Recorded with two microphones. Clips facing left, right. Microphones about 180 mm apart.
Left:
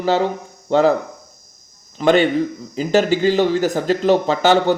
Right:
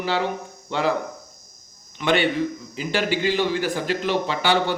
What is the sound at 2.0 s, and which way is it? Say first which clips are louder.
A man's voice: left 6 dB; 45° left (ahead or behind).